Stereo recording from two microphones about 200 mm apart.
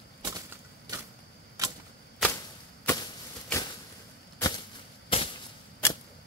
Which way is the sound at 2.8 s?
10° left (ahead or behind).